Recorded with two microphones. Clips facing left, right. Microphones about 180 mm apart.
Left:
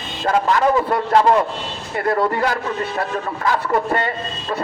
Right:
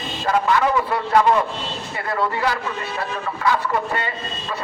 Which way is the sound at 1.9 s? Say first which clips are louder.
Left 6 dB; 50° left (ahead or behind).